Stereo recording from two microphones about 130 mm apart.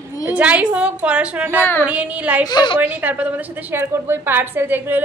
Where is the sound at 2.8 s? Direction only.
10° right (ahead or behind).